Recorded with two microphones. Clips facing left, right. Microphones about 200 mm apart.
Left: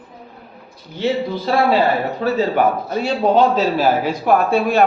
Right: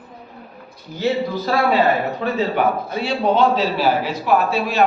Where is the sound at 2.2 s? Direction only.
40° left (ahead or behind).